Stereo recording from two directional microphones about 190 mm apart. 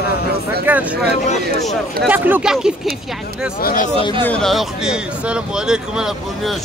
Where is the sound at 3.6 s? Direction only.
45° left (ahead or behind).